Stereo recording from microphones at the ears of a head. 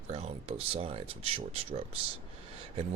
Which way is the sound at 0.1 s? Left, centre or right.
Right.